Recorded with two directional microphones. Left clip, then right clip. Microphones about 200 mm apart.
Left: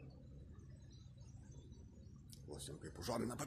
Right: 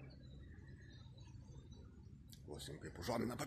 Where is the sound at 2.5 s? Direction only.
15° right (ahead or behind).